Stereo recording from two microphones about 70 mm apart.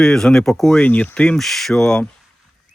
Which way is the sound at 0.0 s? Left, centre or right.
Centre.